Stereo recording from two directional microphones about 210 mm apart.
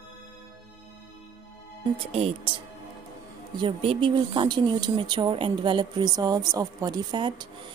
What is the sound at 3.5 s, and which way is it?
Speech, 25° right (ahead or behind).